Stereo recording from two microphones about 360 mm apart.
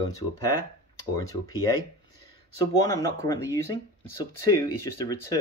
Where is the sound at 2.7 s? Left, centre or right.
Centre.